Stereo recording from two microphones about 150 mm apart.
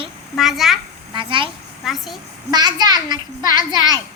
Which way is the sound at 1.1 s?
35° right (ahead or behind).